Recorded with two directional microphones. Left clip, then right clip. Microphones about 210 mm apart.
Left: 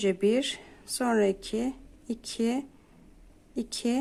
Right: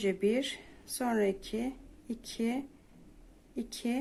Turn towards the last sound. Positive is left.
turn(degrees=25)  # may be behind; listen again after turning